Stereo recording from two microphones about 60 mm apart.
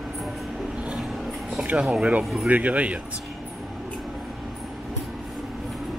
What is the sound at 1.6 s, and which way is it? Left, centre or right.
Speech, centre.